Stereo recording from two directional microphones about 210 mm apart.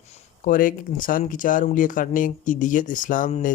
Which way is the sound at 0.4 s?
40° left (ahead or behind).